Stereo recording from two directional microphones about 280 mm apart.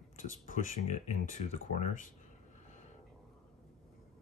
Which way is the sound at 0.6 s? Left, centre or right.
Left.